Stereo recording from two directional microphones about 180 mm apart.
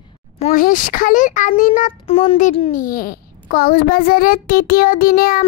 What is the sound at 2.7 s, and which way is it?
A child's voice, 50° left (ahead or behind).